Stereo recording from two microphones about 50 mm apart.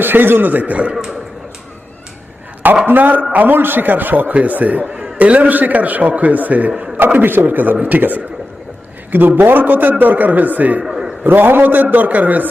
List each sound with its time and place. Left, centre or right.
0.0 s a man's voice: right
2.8 s a man's voice: right
10.8 s a sound: centre
11.2 s a man's voice: right